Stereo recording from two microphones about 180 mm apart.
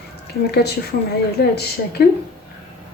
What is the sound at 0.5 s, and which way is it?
A woman's voice, 65° left (ahead or behind).